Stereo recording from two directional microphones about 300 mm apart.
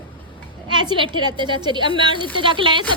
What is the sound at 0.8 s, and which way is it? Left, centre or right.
A woman's voice, centre.